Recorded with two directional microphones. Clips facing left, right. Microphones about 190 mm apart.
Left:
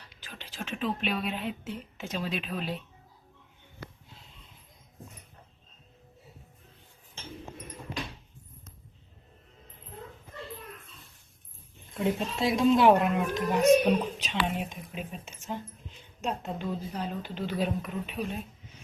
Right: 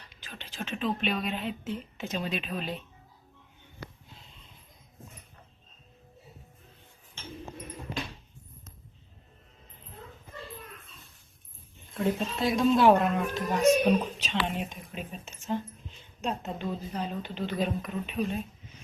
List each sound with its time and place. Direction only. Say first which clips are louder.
0.2 s speech: right 1 dB; 5° left (ahead or behind)
12.0 s a woman's voice: even; 25° left (ahead or behind)
13.0 s speech: left 1 dB; 5° left (ahead or behind)